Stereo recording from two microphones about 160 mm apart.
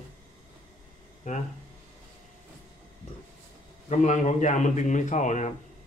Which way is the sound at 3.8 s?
50° left (ahead or behind).